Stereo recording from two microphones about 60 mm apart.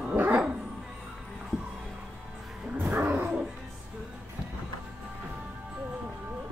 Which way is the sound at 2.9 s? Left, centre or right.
Right.